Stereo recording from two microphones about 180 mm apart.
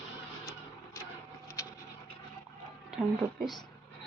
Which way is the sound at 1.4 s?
15° left (ahead or behind).